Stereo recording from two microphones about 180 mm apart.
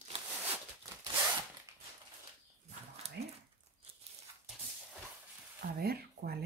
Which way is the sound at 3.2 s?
65° right (ahead or behind).